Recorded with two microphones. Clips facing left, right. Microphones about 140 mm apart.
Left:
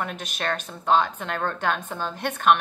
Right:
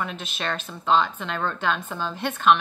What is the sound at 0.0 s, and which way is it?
A woman's voice, 50° left (ahead or behind).